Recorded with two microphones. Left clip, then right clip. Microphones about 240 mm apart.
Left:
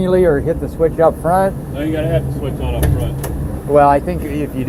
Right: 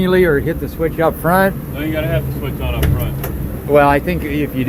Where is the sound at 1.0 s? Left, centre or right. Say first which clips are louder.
Even; right.